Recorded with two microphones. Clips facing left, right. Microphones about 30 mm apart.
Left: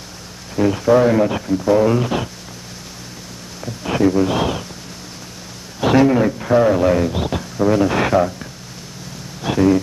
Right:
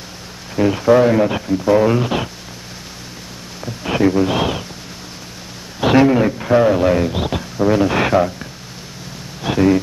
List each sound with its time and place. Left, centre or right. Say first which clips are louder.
0.6 s a man's voice: right 1 dB; right
3.6 s speech: right 1 dB; centre
5.8 s a man's voice: right 1 dB; right